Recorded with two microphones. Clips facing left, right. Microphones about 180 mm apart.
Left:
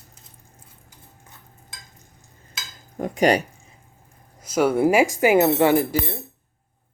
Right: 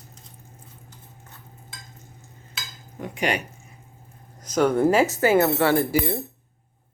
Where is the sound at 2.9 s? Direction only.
40° left (ahead or behind).